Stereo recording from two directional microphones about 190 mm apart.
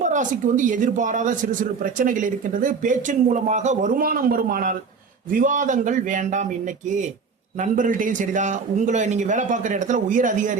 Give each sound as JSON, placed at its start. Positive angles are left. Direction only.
{"t": 0.0, "sound": "a man's voice", "side_deg": -40}